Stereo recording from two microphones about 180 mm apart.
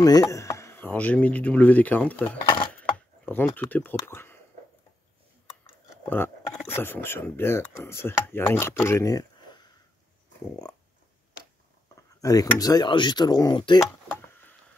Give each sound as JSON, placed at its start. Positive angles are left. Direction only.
{"t": 0.0, "sound": "speech", "side_deg": 20}
{"t": 2.4, "sound": "dishes", "side_deg": 25}
{"t": 3.3, "sound": "speech", "side_deg": 10}
{"t": 6.0, "sound": "speech", "side_deg": 10}
{"t": 12.2, "sound": "speech", "side_deg": 20}